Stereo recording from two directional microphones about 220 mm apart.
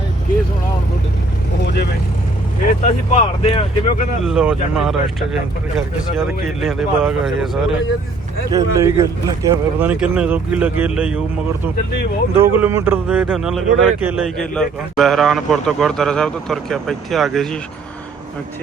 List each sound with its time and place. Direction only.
1.6 s vehicle: 50° left (ahead or behind)
2.8 s speech: 30° left (ahead or behind)
4.2 s speech: 5° right (ahead or behind)
8.4 s speech: 15° right (ahead or behind)
12.4 s speech: 10° right (ahead or behind)